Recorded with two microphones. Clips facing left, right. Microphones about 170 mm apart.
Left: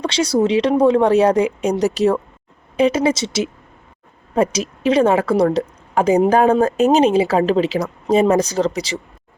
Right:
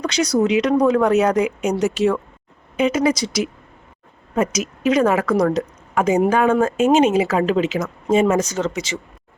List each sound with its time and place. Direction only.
0.0 s a woman's voice: 30° left (ahead or behind)